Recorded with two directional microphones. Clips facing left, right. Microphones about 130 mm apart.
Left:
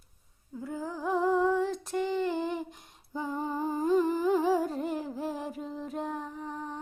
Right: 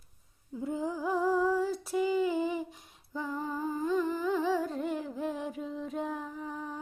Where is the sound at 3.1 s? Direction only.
25° left (ahead or behind); by 4.8 s 40° left (ahead or behind).